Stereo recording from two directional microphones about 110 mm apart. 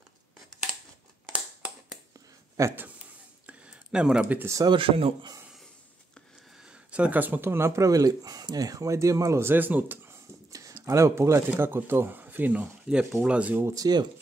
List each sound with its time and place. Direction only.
1.3 s a sound: 10° right (ahead or behind)
2.6 s speech: 30° right (ahead or behind)
3.4 s a sound: 10° right (ahead or behind)
4.6 s a man's voice: 55° right (ahead or behind)
6.9 s speech: 15° right (ahead or behind)
10.5 s speech: 30° right (ahead or behind)
13.7 s speech: 40° right (ahead or behind)